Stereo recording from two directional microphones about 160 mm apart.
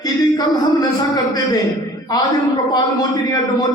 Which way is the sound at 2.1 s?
25° left (ahead or behind).